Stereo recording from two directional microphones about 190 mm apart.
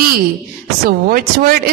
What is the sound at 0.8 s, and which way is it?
Speech, 50° right (ahead or behind).